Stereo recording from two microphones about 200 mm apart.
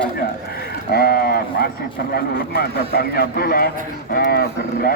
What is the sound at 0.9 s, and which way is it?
Speech, 50° left (ahead or behind).